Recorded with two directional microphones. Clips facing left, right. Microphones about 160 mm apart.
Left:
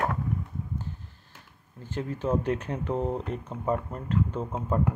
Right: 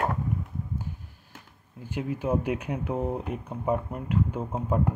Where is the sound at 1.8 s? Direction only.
10° right (ahead or behind).